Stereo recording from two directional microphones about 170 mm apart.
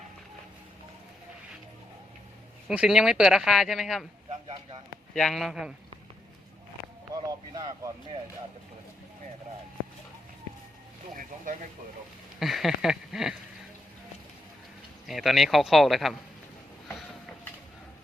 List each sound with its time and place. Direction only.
2.6 s speech: 5° right (ahead or behind)
4.3 s a sound: 30° right (ahead or behind)
5.1 s speech: centre (ahead or behind)
7.1 s speech: 20° right (ahead or behind)
12.4 s speech: centre (ahead or behind)
15.0 s speech: centre (ahead or behind)